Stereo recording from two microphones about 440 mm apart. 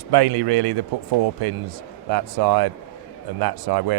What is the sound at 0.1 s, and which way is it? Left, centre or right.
Speech, right.